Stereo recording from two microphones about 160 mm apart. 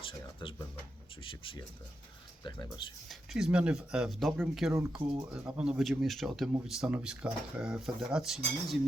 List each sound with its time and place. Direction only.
0.0 s a sound: 30° left (ahead or behind)
1.2 s speech: 30° left (ahead or behind)
3.1 s speech: centre (ahead or behind)
4.7 s speech: 15° right (ahead or behind)
4.9 s speech: 30° right (ahead or behind)
5.5 s speech: 5° right (ahead or behind)